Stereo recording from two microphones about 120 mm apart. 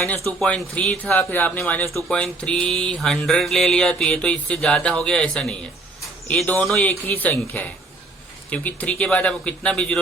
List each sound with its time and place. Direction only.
0.3 s speech: 5° left (ahead or behind)
1.3 s mantra: 15° left (ahead or behind)